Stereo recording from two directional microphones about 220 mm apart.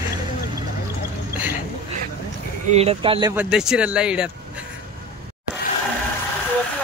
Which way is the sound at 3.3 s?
5° right (ahead or behind).